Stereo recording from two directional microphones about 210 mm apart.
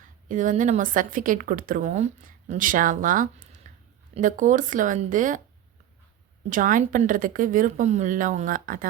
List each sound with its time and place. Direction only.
0.3 s a woman's voice: 40° right (ahead or behind)
6.5 s a woman's voice: 40° right (ahead or behind)